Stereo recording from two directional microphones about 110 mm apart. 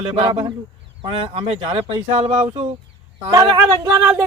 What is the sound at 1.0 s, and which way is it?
A man's voice, 55° right (ahead or behind).